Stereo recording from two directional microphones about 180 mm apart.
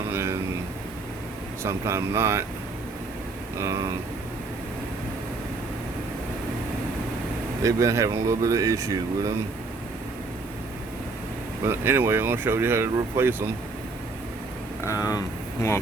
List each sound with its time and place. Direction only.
0.1 s a sound: 15° right (ahead or behind)
1.6 s speech: 15° right (ahead or behind)
3.6 s speech: 20° right (ahead or behind)
7.6 s speech: 15° right (ahead or behind)
11.6 s speech: 15° right (ahead or behind)
14.8 s speech: 20° left (ahead or behind)